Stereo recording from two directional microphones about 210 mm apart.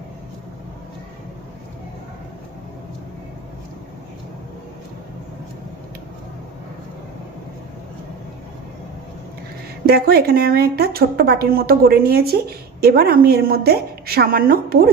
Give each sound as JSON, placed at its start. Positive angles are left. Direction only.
{"t": 9.8, "sound": "speech", "side_deg": -50}